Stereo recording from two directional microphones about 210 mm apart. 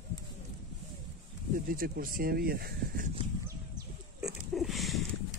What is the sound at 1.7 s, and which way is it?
Speech, 45° right (ahead or behind).